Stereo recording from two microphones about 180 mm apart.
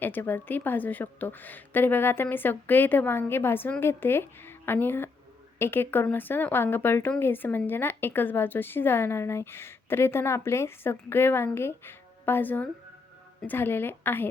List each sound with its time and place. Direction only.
0.0 s speech: 10° left (ahead or behind)